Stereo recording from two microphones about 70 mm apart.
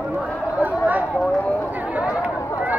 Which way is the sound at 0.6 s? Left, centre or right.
Right.